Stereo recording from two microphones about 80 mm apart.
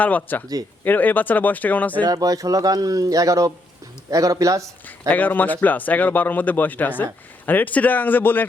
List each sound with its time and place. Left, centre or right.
0.0 s speech: centre
2.0 s speech: right
5.0 s speech: left